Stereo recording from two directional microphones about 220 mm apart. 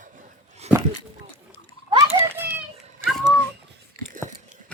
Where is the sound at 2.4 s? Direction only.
10° right (ahead or behind).